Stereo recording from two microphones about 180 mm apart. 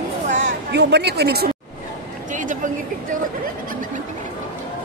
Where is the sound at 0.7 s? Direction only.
65° right (ahead or behind).